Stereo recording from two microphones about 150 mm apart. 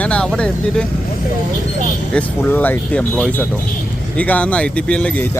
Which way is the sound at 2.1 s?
10° left (ahead or behind).